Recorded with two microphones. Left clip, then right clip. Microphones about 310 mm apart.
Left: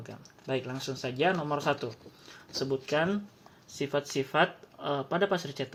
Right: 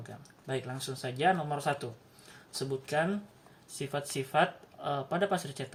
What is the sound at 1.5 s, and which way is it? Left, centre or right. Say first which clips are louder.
Speech: left 3 dB; centre.